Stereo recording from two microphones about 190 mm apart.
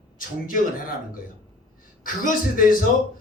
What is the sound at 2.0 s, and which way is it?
Speech, 45° left (ahead or behind).